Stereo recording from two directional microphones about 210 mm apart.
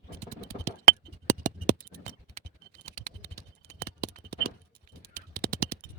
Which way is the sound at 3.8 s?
45° right (ahead or behind).